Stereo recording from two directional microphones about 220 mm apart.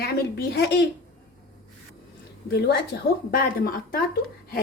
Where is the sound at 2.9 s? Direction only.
50° left (ahead or behind).